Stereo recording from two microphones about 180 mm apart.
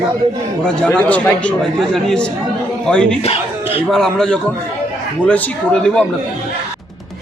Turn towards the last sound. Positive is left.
turn(degrees=5)  # may be behind; listen again after turning